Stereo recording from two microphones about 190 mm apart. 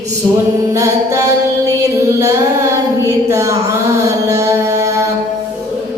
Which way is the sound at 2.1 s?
15° right (ahead or behind).